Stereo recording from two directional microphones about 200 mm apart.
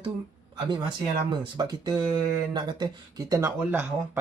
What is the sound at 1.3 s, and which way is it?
Speech, 20° right (ahead or behind).